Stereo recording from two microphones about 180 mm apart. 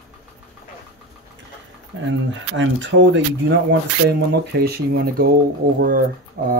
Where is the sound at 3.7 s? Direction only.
65° right (ahead or behind).